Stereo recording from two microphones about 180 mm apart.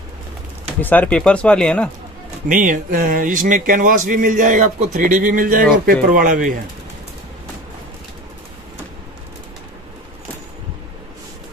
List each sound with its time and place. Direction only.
0.7 s speech: 10° left (ahead or behind)
2.4 s speech: 45° right (ahead or behind)